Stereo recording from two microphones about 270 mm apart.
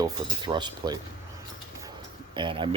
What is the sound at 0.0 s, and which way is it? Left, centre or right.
Speech, centre.